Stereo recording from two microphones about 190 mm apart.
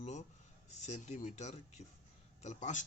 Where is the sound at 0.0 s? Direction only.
35° left (ahead or behind).